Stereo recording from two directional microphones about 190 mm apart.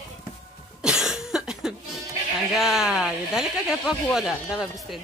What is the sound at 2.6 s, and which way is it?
Speech, centre (ahead or behind).